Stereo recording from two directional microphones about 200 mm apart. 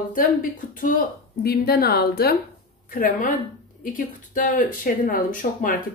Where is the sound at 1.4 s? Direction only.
50° left (ahead or behind).